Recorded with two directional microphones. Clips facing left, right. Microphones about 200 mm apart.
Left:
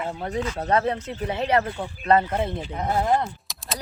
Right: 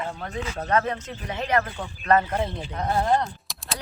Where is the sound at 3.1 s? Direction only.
Centre (ahead or behind).